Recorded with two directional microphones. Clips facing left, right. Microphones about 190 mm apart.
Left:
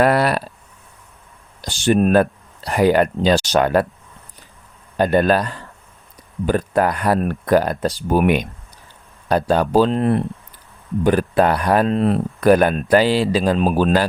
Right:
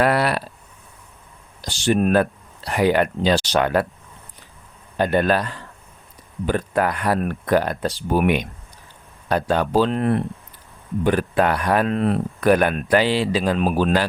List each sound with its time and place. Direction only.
0.0 s a sound: 45° left (ahead or behind)
1.6 s speech: 50° left (ahead or behind)
2.0 s speech: 35° left (ahead or behind)
4.9 s speech: 40° left (ahead or behind)